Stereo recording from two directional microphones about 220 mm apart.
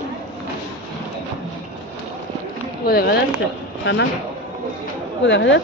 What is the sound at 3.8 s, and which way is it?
Speech, 55° left (ahead or behind).